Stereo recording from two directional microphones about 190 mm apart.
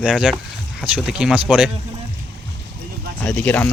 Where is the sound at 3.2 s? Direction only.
10° left (ahead or behind).